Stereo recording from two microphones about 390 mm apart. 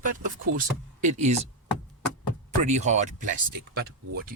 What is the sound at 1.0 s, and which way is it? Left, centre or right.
Speech, centre.